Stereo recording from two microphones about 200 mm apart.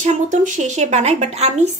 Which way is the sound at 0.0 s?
35° right (ahead or behind).